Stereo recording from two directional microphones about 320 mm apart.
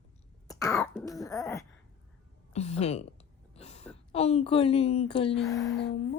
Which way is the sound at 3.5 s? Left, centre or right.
Centre.